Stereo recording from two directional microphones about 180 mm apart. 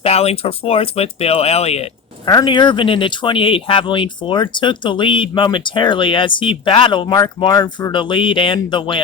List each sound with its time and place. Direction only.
0.0 s speech: 35° left (ahead or behind)
2.3 s speech: 25° left (ahead or behind)